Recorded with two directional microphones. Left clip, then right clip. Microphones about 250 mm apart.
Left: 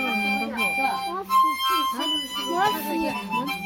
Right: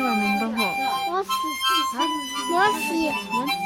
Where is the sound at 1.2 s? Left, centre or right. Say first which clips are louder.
Left 3 dB; centre.